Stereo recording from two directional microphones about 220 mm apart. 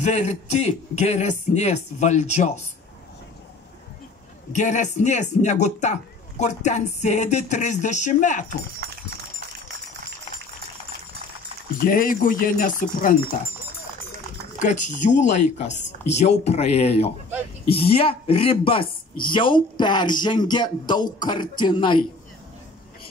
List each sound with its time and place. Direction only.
0.0 s a man's voice: 30° left (ahead or behind)
4.5 s a man's voice: 35° left (ahead or behind)
11.8 s a man's voice: 40° left (ahead or behind)
14.6 s a man's voice: 35° left (ahead or behind)